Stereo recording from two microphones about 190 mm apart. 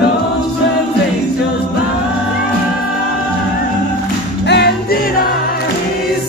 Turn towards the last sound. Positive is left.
turn(degrees=60)  # may be behind; listen again after turning